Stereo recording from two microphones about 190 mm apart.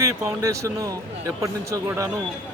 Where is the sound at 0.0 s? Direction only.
15° right (ahead or behind).